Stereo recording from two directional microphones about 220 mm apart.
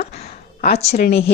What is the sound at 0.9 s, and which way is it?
Speech, 45° left (ahead or behind).